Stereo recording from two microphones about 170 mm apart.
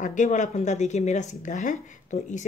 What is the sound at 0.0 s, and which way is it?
Speech, 50° left (ahead or behind).